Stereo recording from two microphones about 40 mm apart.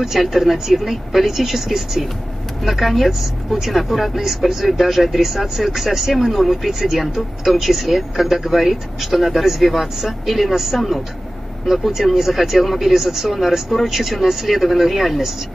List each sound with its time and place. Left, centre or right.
0.0 s speech: centre
4.2 s speech: centre